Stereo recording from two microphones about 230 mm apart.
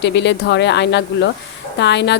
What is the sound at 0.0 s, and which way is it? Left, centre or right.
A woman's voice, left.